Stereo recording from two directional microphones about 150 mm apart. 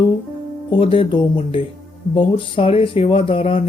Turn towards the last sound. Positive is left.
turn(degrees=40)  # may be behind; listen again after turning